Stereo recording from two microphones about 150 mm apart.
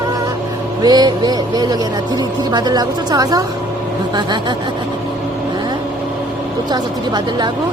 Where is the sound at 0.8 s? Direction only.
25° right (ahead or behind).